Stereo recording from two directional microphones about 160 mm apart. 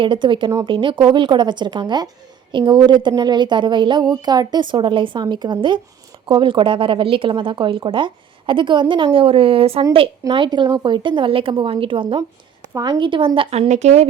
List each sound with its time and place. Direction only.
0.0 s a woman's voice: 30° right (ahead or behind)